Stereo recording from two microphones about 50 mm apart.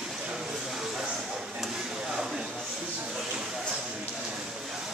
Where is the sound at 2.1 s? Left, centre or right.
Centre.